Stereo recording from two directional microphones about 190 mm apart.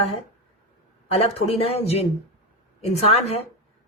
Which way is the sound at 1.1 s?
30° left (ahead or behind).